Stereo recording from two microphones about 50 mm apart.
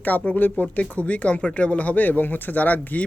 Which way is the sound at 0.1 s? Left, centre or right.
Left.